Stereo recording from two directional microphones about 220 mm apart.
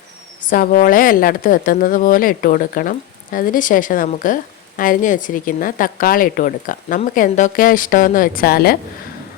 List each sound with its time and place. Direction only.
0.4 s a woman's voice: 40° left (ahead or behind)